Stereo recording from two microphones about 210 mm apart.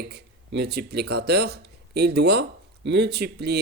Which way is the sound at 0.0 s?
50° right (ahead or behind).